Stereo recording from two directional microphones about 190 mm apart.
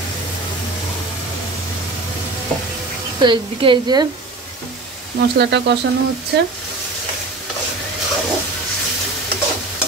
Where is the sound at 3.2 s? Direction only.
25° right (ahead or behind).